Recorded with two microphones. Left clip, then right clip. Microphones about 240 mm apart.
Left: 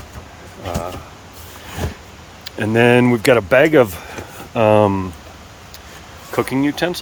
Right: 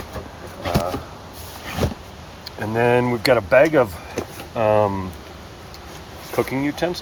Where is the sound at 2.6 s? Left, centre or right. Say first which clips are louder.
Left 5 dB; left.